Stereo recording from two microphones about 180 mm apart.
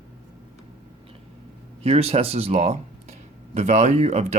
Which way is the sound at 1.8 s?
35° right (ahead or behind).